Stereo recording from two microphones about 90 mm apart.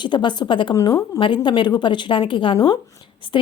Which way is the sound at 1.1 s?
65° left (ahead or behind).